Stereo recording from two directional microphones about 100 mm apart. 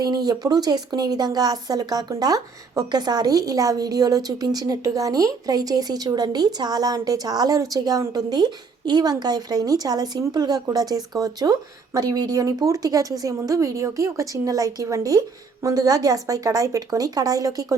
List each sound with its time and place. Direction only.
0.0 s speech: 40° right (ahead or behind)